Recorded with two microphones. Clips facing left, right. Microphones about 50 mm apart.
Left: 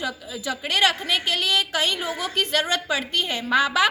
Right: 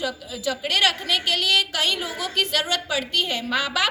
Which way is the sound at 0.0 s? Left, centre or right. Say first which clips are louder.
Right 2 dB; left.